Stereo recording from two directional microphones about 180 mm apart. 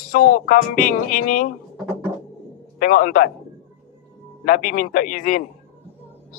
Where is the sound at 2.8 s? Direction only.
50° left (ahead or behind).